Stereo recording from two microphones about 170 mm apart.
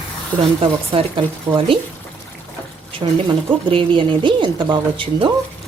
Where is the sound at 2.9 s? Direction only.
30° right (ahead or behind).